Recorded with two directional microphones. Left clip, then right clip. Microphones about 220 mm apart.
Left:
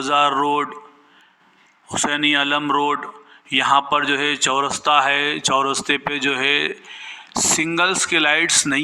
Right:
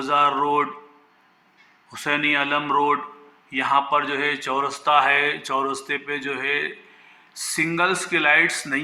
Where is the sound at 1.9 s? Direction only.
35° left (ahead or behind).